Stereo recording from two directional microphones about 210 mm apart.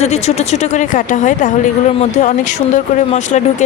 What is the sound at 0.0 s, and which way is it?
Speech, 30° left (ahead or behind).